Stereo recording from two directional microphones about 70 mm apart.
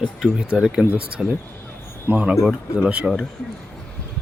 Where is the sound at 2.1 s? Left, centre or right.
Right.